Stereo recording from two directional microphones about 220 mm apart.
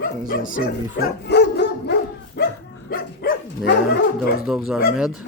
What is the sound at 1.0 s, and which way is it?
Dog, 45° left (ahead or behind).